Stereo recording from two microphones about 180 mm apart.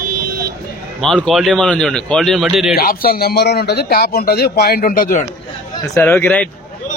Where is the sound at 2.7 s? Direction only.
55° left (ahead or behind).